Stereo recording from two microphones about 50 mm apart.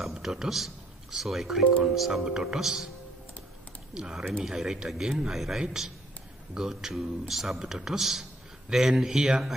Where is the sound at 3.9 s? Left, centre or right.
Centre.